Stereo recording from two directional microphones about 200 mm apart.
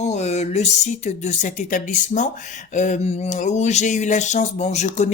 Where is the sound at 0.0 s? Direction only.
35° left (ahead or behind).